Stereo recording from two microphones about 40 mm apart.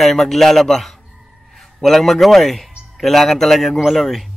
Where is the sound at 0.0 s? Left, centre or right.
Centre.